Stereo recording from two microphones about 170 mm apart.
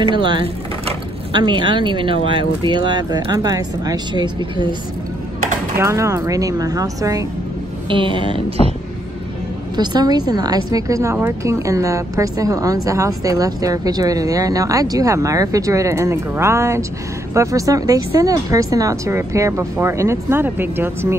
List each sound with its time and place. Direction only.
0.0 s a woman's voice: 30° right (ahead or behind)
5.8 s a woman's voice: 15° right (ahead or behind)
9.8 s a woman's voice: 25° right (ahead or behind)